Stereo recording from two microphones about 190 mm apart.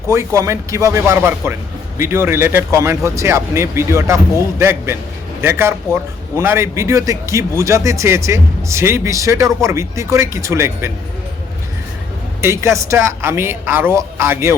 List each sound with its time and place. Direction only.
0.1 s speech: 15° right (ahead or behind)
12.4 s speech: 15° right (ahead or behind)